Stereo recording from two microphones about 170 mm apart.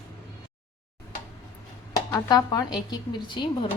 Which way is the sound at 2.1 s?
25° left (ahead or behind).